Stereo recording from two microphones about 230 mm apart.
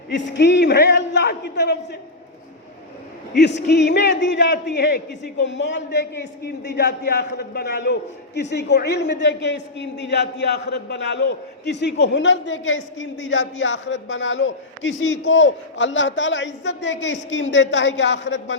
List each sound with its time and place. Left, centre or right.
0.1 s a man's voice: left
3.3 s a man's voice: left